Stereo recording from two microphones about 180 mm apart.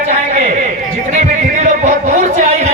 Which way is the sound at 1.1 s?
40° right (ahead or behind).